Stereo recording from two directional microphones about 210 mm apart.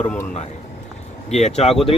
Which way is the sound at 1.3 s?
30° left (ahead or behind).